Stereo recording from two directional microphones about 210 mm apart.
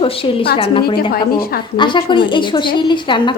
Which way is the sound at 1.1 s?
45° left (ahead or behind).